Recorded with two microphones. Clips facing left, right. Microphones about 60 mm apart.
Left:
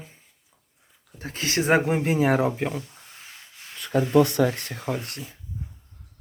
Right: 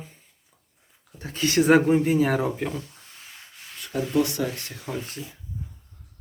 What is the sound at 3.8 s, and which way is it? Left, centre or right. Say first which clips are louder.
Speech: left 5 dB; left.